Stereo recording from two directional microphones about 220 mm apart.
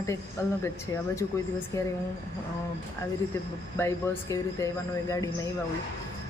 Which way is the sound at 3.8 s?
10° left (ahead or behind).